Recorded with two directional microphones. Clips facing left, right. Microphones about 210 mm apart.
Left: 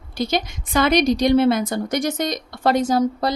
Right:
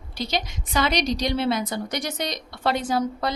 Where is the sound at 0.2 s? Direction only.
50° left (ahead or behind).